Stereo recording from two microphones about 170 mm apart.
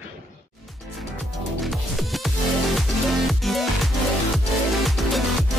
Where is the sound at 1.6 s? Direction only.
Centre (ahead or behind).